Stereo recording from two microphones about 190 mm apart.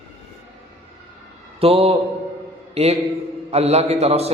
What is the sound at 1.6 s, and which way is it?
A man's voice, 30° right (ahead or behind).